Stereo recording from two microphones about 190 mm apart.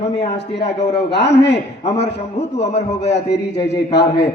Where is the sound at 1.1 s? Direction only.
65° left (ahead or behind).